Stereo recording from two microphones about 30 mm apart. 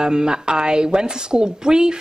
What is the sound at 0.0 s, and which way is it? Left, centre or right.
Speech, right.